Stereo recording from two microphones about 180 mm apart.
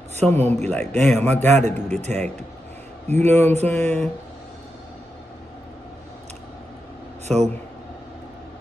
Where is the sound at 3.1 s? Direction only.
10° left (ahead or behind).